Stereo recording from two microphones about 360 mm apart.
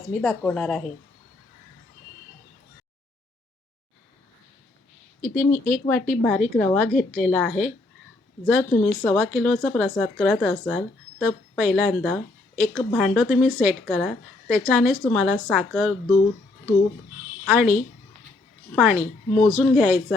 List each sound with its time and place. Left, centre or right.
0.1 s a woman's voice: centre
5.2 s a woman's voice: centre
17.5 s a woman's voice: centre